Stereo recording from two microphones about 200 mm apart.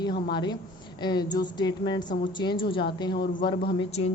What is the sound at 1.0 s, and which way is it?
Speech, 20° left (ahead or behind).